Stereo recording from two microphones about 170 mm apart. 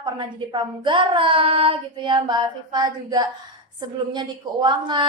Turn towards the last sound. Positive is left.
turn(degrees=-25)  # may be behind; listen again after turning